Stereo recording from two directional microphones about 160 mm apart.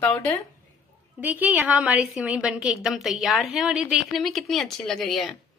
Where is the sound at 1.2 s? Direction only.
10° right (ahead or behind).